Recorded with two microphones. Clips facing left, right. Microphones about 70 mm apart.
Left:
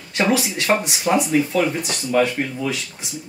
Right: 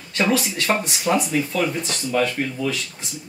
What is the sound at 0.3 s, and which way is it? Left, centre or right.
Speech, centre.